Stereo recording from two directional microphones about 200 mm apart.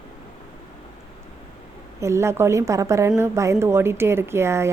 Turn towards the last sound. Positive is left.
turn(degrees=-15)  # may be behind; listen again after turning